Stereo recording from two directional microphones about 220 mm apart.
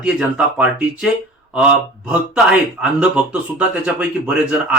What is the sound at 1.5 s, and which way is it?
A man's voice, 5° right (ahead or behind).